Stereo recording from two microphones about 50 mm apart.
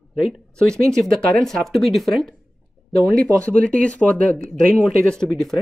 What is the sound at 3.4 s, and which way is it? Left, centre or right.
Speech, left.